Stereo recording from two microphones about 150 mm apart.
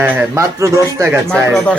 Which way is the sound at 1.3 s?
5° left (ahead or behind).